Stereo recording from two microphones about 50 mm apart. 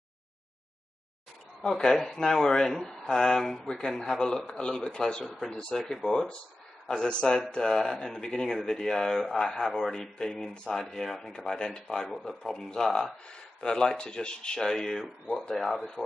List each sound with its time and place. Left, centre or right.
1.6 s speech: centre
5.2 s speech: centre
5.5 s speech: centre
6.9 s speech: centre
11.3 s speech: centre
15.5 s speech: centre